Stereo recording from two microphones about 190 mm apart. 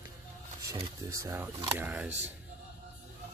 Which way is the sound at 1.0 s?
15° right (ahead or behind).